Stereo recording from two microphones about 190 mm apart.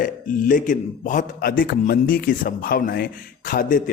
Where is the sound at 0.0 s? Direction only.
45° left (ahead or behind).